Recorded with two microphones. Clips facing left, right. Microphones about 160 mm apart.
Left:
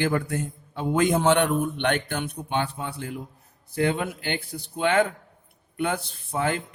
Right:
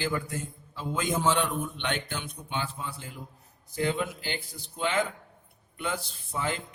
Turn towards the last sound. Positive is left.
turn(degrees=60)  # may be behind; listen again after turning